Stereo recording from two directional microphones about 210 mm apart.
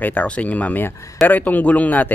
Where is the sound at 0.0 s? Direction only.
10° left (ahead or behind).